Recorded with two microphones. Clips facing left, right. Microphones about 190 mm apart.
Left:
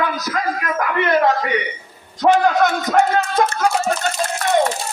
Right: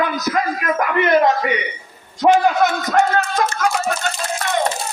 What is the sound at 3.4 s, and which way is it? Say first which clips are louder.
Speech: left 5 dB; 25° left (ahead or behind).